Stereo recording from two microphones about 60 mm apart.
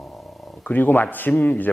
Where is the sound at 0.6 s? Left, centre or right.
Left.